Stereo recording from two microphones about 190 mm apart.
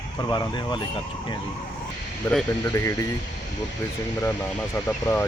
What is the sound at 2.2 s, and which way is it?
Speech, 20° left (ahead or behind).